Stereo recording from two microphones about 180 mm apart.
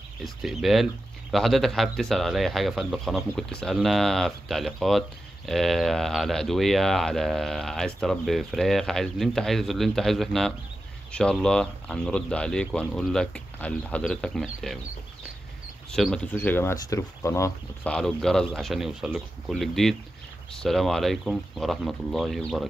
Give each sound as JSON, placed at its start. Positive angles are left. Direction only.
{"t": 0.2, "sound": "speech", "side_deg": 0}
{"t": 15.9, "sound": "speech", "side_deg": 5}
{"t": 17.9, "sound": "speech", "side_deg": 5}